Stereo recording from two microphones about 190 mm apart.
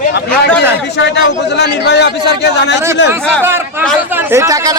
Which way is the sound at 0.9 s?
65° left (ahead or behind).